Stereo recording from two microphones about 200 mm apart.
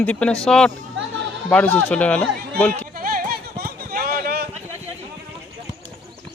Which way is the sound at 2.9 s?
45° right (ahead or behind).